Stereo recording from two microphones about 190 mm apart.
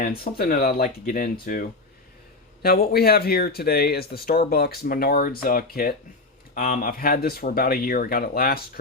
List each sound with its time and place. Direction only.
0.3 s speech: 50° left (ahead or behind)